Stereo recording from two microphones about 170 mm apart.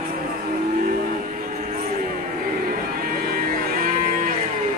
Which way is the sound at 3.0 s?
60° right (ahead or behind).